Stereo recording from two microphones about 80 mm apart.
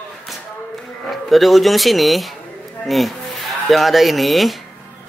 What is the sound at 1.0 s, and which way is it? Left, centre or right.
Speech, centre.